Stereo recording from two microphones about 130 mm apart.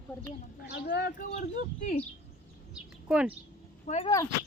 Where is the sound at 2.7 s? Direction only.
10° right (ahead or behind).